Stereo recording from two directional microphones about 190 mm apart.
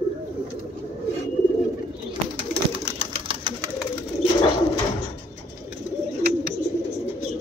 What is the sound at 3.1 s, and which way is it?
Pigeon, 30° right (ahead or behind).